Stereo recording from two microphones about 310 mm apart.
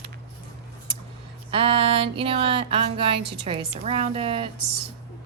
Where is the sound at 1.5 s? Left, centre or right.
Centre.